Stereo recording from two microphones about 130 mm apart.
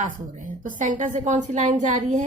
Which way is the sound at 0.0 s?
90° right.